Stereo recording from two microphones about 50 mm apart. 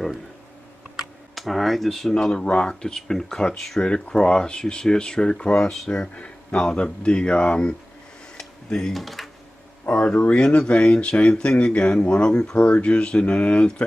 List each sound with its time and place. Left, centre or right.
0.9 s computer keyboard: centre
2.3 s speech: left
8.4 s tick-tock: centre
8.9 s speech: centre
9.8 s speech: left